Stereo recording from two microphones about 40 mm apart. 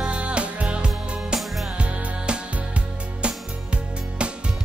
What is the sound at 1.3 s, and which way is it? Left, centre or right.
Music, centre.